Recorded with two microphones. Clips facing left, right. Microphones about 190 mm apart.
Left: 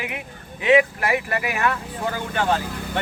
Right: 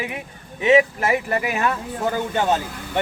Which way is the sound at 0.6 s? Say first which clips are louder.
Right 1 dB; 20° right (ahead or behind).